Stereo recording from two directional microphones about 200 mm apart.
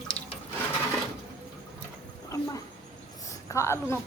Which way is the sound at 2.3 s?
15° left (ahead or behind).